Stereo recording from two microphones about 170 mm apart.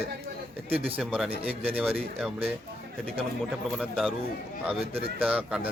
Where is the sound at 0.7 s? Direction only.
35° right (ahead or behind).